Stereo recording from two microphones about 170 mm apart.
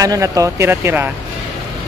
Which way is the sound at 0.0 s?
20° right (ahead or behind).